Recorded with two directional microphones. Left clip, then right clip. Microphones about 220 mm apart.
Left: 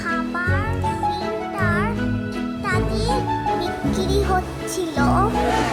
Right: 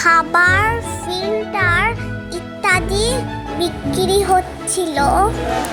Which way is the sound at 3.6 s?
15° right (ahead or behind).